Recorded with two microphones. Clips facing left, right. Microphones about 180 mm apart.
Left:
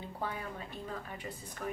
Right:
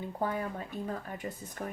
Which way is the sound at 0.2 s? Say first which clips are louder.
Right 6 dB; 45° right (ahead or behind).